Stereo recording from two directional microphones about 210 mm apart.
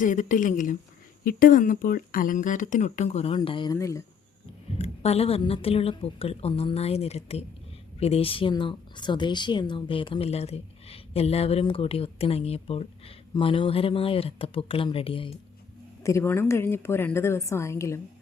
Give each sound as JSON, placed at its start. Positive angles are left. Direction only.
{"t": 0.0, "sound": "speech", "side_deg": 40}
{"t": 4.8, "sound": "speech", "side_deg": 30}
{"t": 16.0, "sound": "a woman's voice", "side_deg": 10}